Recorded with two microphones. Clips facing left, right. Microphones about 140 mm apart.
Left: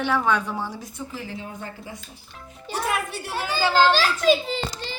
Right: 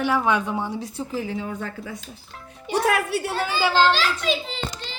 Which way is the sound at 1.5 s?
85° right.